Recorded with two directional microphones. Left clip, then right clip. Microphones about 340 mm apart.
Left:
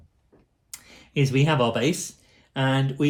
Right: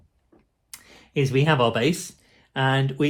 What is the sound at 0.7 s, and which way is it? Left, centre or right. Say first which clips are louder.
Speech: right 2 dB; centre.